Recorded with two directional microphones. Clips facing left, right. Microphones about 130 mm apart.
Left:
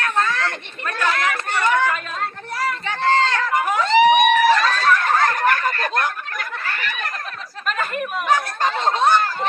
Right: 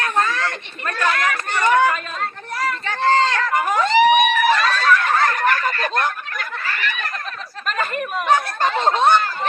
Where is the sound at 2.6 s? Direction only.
15° left (ahead or behind).